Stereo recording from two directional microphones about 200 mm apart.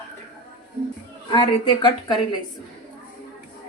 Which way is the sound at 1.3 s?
20° left (ahead or behind).